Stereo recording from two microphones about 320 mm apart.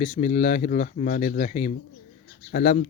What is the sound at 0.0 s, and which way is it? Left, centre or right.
Speech, left.